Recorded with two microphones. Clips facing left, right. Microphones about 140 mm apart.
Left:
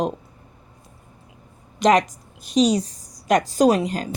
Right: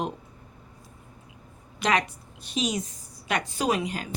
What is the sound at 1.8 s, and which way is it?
A woman's voice, 40° left (ahead or behind).